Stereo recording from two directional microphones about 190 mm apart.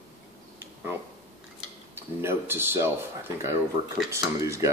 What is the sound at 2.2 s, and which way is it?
Speech, 10° right (ahead or behind).